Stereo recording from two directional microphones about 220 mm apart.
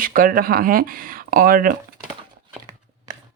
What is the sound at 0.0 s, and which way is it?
Speech, 40° right (ahead or behind).